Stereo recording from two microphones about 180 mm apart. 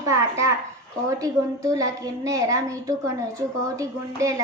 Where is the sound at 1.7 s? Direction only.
20° right (ahead or behind).